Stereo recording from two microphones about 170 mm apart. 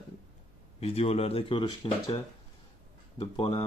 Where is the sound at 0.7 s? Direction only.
35° left (ahead or behind).